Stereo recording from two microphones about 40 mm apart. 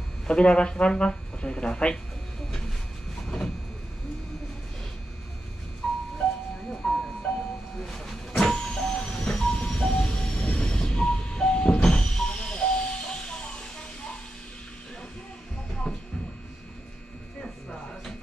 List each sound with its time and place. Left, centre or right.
0.3 s speech: left
3.3 s vehicle: centre
5.8 s music: centre
7.8 s a sound: centre
8.5 s vehicle: left
8.8 s music: centre
15.9 s a sound: centre